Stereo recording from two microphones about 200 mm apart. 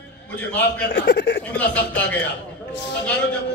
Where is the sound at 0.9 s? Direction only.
55° left (ahead or behind).